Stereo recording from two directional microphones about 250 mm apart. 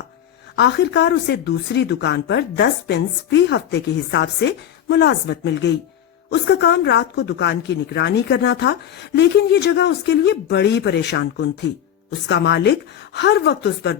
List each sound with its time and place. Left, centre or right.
0.5 s speech: left